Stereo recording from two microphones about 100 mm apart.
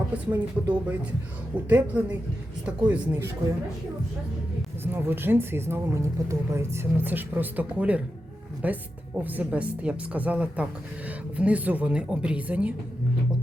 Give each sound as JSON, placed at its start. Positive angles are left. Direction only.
{"t": 0.3, "sound": "speech", "side_deg": -15}
{"t": 4.8, "sound": "speech", "side_deg": -20}